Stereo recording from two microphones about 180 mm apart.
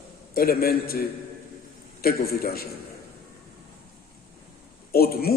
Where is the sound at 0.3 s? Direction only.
55° left (ahead or behind).